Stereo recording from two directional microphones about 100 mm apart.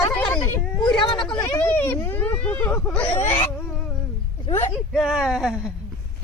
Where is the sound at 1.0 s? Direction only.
55° left (ahead or behind).